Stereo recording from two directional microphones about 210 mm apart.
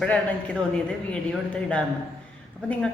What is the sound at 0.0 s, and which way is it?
A woman's voice, 5° left (ahead or behind).